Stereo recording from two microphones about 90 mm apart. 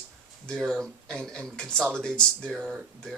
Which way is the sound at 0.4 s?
5° left (ahead or behind).